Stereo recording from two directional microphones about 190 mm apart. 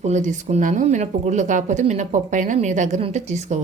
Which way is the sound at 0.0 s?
40° right (ahead or behind).